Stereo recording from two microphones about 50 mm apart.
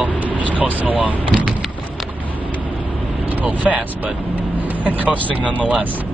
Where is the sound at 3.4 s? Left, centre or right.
Right.